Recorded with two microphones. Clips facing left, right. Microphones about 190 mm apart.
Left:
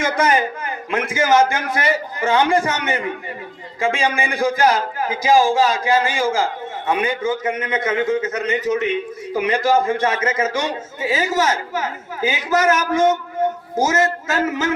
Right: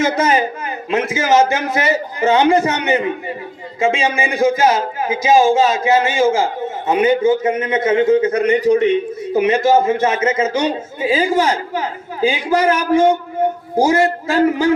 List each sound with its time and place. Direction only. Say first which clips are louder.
0.0 s a man's voice: right 3 dB; 25° right (ahead or behind)
14.4 s a man's voice: right 8 dB; 35° right (ahead or behind)